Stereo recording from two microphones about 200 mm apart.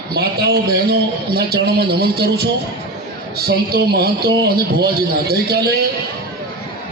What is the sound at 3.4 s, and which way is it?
A man's voice, 50° right (ahead or behind).